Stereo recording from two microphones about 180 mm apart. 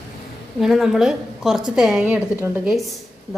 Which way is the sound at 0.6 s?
Centre (ahead or behind).